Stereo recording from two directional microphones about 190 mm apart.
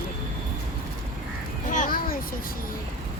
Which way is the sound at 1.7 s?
45° left (ahead or behind).